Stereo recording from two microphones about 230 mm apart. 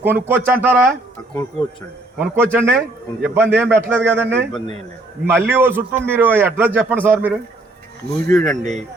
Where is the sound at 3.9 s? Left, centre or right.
Centre.